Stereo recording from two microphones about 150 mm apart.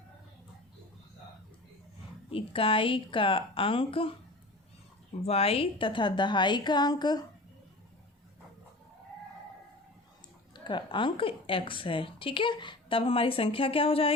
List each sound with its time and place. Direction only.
2.3 s a woman's voice: 35° left (ahead or behind)
5.2 s a woman's voice: 40° left (ahead or behind)
10.5 s a woman's voice: 30° left (ahead or behind)